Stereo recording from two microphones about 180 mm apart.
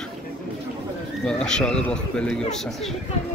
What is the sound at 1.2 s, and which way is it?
Speech, 5° left (ahead or behind).